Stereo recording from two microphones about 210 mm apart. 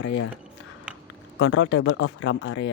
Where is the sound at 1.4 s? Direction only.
60° left (ahead or behind).